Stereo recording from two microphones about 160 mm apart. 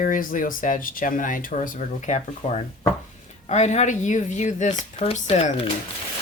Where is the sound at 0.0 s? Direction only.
60° left (ahead or behind); by 5.6 s 40° left (ahead or behind).